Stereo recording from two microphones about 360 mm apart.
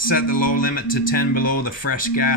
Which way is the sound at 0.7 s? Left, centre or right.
Left.